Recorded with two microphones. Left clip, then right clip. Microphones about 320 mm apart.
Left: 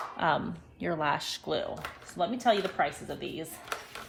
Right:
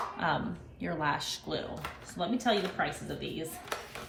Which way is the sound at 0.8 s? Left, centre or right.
Left.